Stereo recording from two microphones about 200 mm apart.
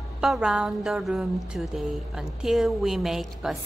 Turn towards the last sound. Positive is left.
turn(degrees=0)  # may be behind; listen again after turning